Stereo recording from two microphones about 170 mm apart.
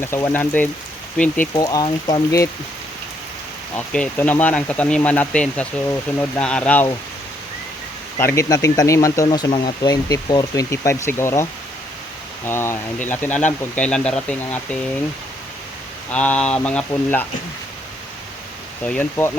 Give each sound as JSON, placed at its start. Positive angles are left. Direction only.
{"t": 0.0, "sound": "speech", "side_deg": 15}
{"t": 1.5, "sound": "speech", "side_deg": 25}
{"t": 3.8, "sound": "speech", "side_deg": 10}
{"t": 8.2, "sound": "speech", "side_deg": 15}
{"t": 12.5, "sound": "speech", "side_deg": 15}
{"t": 16.1, "sound": "speech", "side_deg": 10}
{"t": 18.8, "sound": "speech", "side_deg": 10}